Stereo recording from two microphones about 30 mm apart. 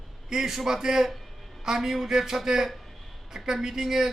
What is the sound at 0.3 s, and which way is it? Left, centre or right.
A man's voice, centre.